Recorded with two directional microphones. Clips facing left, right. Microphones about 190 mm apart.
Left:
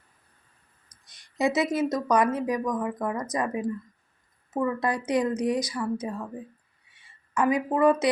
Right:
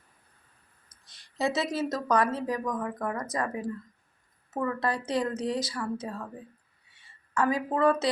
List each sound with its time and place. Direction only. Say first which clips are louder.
1.0 s speech: left 4 dB; 15° left (ahead or behind)
7.3 s speech: left 3 dB; 15° left (ahead or behind)